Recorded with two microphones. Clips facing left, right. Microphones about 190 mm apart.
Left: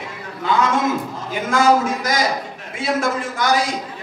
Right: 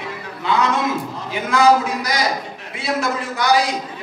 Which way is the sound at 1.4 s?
45° left (ahead or behind).